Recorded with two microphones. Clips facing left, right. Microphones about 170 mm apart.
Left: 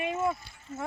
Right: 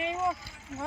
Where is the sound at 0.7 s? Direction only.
80° right.